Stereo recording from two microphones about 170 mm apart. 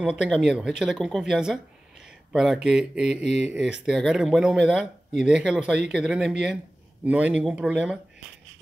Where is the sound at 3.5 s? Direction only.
5° right (ahead or behind).